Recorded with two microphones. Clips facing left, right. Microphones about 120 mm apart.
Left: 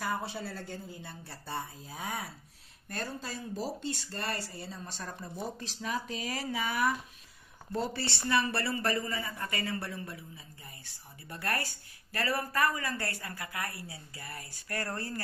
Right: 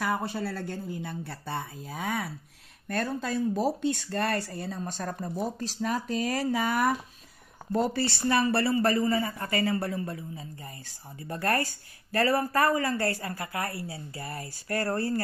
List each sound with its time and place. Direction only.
0.0 s a man's voice: 60° right (ahead or behind); by 15.1 s 30° right (ahead or behind)